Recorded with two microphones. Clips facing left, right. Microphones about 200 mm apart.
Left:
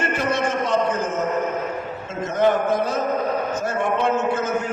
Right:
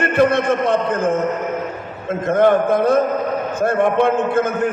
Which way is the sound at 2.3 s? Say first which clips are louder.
Right 5 dB; 55° right (ahead or behind).